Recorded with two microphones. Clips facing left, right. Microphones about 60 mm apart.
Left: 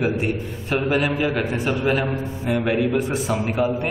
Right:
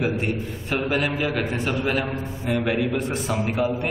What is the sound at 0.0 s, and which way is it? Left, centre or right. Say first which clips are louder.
A man's voice: left 2 dB; centre.